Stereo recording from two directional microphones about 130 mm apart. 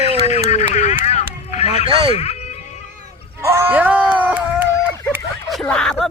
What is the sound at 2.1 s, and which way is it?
Speech, 55° left (ahead or behind).